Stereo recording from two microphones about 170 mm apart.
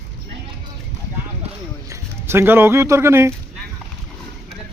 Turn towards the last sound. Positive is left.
turn(degrees=-15)  # may be behind; listen again after turning